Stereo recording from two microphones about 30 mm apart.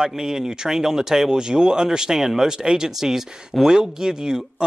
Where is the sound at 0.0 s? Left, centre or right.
Centre.